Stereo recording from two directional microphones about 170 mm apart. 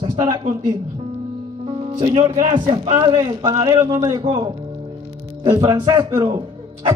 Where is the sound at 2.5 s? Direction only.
30° right (ahead or behind).